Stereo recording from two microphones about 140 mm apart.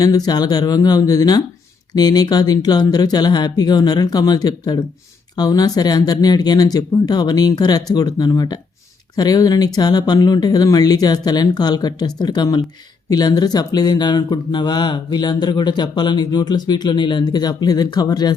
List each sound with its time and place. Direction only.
0.0 s speech: 25° left (ahead or behind)